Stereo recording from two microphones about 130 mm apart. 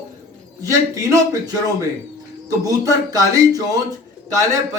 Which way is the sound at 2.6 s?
30° right (ahead or behind).